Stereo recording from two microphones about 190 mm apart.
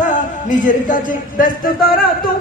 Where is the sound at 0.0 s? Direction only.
40° left (ahead or behind).